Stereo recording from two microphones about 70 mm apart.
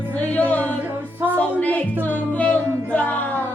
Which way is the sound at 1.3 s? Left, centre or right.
Left.